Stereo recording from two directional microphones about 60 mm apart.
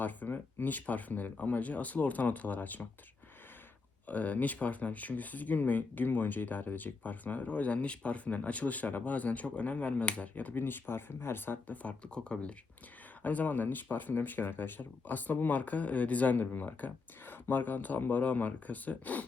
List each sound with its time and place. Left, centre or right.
0.0 s speech: left
4.0 s speech: left
13.2 s speech: left